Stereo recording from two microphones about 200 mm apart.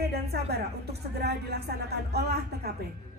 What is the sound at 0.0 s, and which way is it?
Music, 55° right (ahead or behind).